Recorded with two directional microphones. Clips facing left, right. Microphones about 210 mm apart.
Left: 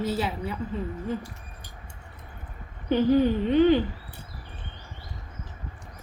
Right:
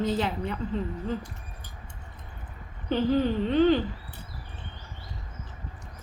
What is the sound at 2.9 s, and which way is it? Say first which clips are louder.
Whimper: left 3 dB; 15° left (ahead or behind).